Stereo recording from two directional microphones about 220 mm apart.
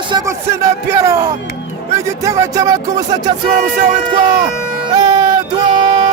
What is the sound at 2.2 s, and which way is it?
Speech, 15° right (ahead or behind).